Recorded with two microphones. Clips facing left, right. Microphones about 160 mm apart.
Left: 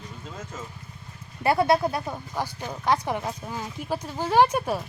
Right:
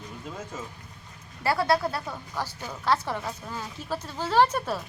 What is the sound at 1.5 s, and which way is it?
Speech, 20° left (ahead or behind).